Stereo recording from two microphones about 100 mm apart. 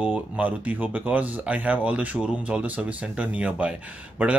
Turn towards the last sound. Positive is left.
turn(degrees=-15)  # may be behind; listen again after turning